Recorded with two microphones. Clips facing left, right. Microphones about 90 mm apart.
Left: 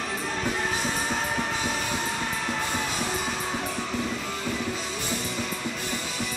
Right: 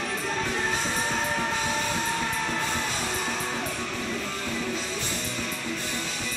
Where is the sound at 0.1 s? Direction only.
5° left (ahead or behind).